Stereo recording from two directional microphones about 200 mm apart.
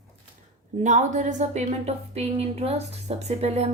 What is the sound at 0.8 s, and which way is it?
A woman's voice, 40° right (ahead or behind).